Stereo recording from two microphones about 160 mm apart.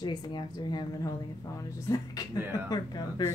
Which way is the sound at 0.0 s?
25° left (ahead or behind).